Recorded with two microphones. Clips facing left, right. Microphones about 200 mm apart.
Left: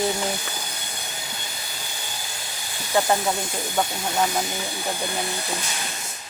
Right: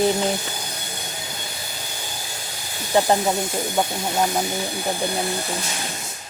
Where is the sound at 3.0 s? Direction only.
20° right (ahead or behind).